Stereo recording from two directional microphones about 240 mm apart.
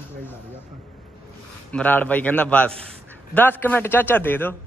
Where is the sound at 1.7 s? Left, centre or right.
Centre.